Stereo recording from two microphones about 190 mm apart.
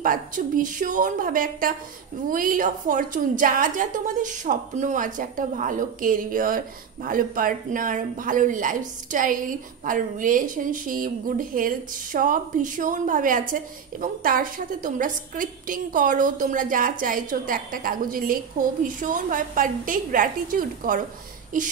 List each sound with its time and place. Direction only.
0.0 s a woman's voice: 45° right (ahead or behind)